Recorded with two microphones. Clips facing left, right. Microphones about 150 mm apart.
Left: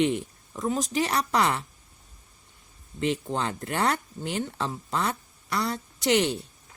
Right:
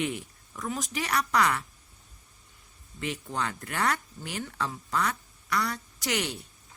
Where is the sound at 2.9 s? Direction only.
25° left (ahead or behind).